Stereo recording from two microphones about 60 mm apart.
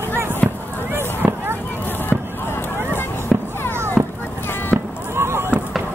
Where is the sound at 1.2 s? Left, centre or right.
Right.